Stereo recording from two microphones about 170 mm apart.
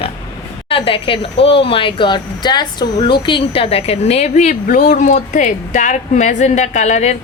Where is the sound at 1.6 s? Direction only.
30° left (ahead or behind).